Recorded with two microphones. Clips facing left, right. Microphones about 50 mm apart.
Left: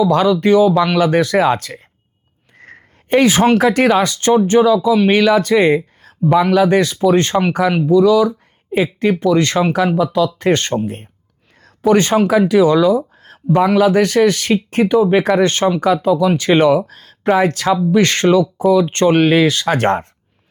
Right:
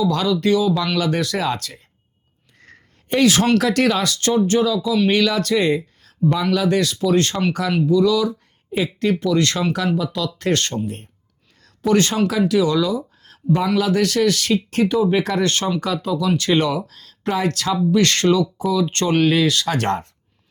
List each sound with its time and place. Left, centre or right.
0.0 s speech: left